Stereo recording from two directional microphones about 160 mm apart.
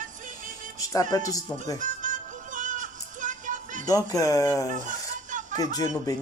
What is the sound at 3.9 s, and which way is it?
Speech, 20° left (ahead or behind).